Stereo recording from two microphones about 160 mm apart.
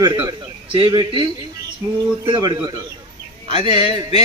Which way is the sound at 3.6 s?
40° left (ahead or behind).